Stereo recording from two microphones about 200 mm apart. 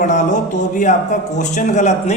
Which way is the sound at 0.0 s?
40° left (ahead or behind).